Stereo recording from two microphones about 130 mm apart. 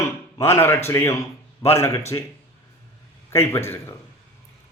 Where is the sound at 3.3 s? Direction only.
20° left (ahead or behind).